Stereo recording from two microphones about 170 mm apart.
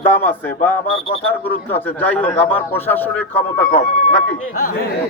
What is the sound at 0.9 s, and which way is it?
Speech, 35° left (ahead or behind).